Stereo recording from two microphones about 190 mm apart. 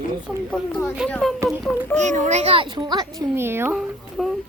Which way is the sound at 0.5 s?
5° left (ahead or behind).